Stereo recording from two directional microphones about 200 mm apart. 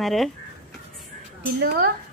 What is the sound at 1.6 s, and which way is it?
Speech, 50° right (ahead or behind).